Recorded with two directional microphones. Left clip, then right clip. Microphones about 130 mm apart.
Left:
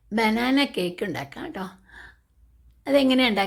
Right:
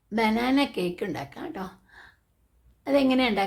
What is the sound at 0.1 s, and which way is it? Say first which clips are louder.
A woman's voice: left 2 dB; 25° left (ahead or behind).